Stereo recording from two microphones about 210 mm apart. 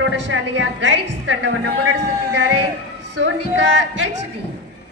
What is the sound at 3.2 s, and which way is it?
Speech, 60° right (ahead or behind).